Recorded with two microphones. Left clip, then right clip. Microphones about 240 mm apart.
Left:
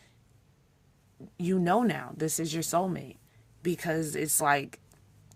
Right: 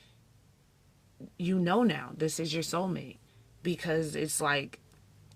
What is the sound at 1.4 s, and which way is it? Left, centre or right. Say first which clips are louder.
Speech: left 2 dB; left.